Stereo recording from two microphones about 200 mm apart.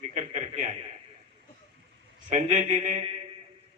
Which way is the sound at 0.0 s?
35° right (ahead or behind).